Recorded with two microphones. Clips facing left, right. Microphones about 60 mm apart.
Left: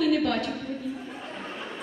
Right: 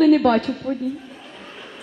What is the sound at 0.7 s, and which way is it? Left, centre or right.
Speech, right.